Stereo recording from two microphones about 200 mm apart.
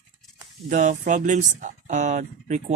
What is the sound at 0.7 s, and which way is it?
Speech, 40° right (ahead or behind).